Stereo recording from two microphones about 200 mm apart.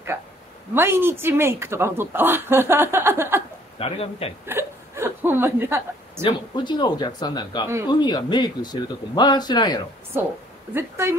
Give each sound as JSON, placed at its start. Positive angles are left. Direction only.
{"t": 0.7, "sound": "speech", "side_deg": -10}
{"t": 3.8, "sound": "speech", "side_deg": 30}
{"t": 4.5, "sound": "speech", "side_deg": -10}
{"t": 6.2, "sound": "speech", "side_deg": 20}
{"t": 10.7, "sound": "speech", "side_deg": -10}